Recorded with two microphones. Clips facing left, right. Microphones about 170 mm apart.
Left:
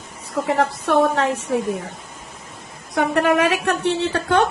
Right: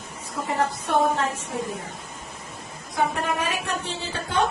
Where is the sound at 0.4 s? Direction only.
80° left.